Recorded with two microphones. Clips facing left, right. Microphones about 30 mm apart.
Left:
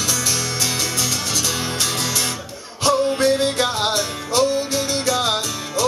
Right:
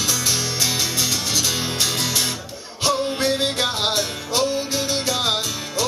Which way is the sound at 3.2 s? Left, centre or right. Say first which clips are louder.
Left 3 dB; centre.